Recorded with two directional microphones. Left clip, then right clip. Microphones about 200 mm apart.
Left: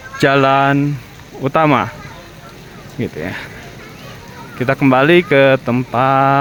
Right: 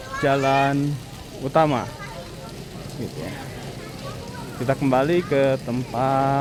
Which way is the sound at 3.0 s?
20° left (ahead or behind).